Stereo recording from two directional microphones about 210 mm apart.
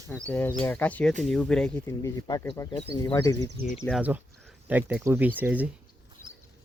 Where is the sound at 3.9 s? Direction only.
5° right (ahead or behind).